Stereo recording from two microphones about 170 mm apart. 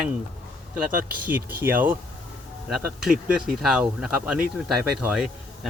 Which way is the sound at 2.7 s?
Centre (ahead or behind).